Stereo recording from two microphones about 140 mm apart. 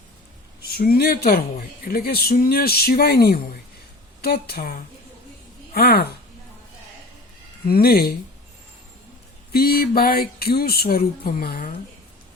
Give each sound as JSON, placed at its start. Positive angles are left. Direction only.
{"t": 0.6, "sound": "speech", "side_deg": 90}
{"t": 7.7, "sound": "speech", "side_deg": 90}
{"t": 9.5, "sound": "speech", "side_deg": 90}